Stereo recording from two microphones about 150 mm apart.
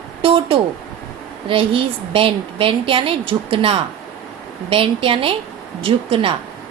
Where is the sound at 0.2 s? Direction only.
35° right (ahead or behind).